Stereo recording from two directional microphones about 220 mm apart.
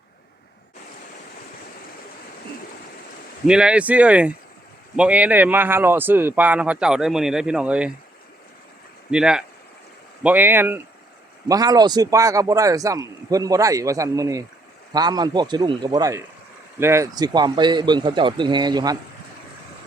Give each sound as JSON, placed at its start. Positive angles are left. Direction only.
{"t": 3.4, "sound": "a man's voice", "side_deg": -5}
{"t": 9.0, "sound": "a man's voice", "side_deg": -5}